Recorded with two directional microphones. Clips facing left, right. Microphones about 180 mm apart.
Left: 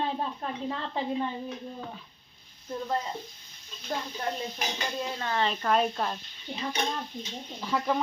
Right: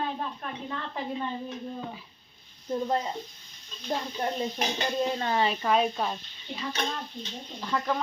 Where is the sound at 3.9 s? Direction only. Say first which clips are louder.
Right 2 dB; 20° right (ahead or behind).